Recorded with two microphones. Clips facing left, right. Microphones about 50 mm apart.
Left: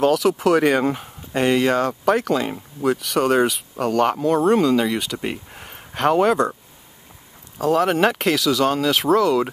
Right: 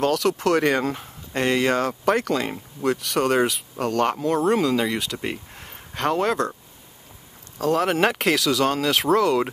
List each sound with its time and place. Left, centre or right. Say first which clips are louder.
0.0 s speech: left 4 dB; centre
7.5 s speech: left 3 dB; centre